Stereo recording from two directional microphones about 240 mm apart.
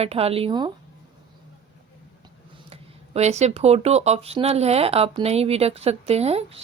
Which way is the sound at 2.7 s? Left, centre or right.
Right.